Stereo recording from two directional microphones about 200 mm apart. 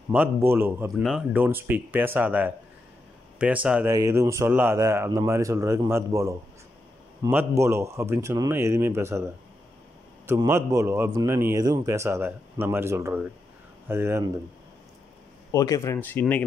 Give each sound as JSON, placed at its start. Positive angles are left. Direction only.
{"t": 0.1, "sound": "a man's voice", "side_deg": -10}
{"t": 15.5, "sound": "speech", "side_deg": 15}